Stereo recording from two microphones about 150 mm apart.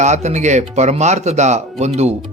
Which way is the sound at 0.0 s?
50° right (ahead or behind).